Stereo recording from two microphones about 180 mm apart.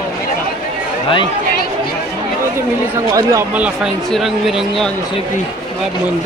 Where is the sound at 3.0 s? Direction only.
20° right (ahead or behind).